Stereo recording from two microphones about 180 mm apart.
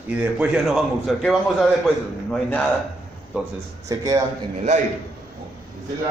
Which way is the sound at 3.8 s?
20° right (ahead or behind).